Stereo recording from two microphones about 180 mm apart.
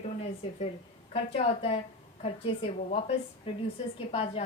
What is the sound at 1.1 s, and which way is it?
A woman's voice, 35° left (ahead or behind).